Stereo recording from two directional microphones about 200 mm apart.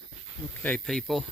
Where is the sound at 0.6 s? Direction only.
5° left (ahead or behind).